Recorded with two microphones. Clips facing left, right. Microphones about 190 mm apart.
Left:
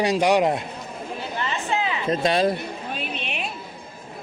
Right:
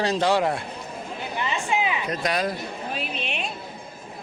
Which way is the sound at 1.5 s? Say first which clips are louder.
Right 1 dB; 15° right (ahead or behind).